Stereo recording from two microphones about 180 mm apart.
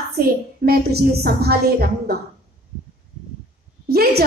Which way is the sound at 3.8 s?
60° right (ahead or behind).